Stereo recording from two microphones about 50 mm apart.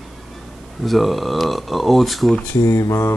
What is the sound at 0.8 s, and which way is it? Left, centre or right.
Speech, centre.